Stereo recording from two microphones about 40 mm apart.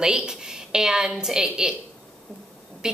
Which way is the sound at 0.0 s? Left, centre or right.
Centre.